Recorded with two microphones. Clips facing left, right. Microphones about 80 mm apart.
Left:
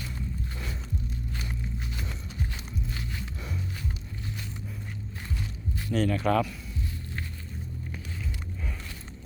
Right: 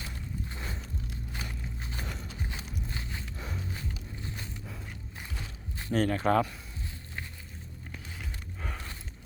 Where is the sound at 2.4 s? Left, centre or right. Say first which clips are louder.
Left 3 dB; right.